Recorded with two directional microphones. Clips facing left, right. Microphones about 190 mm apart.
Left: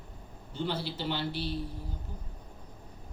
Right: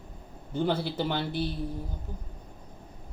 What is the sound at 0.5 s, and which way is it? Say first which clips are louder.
Speech: right 6 dB; 50° right (ahead or behind).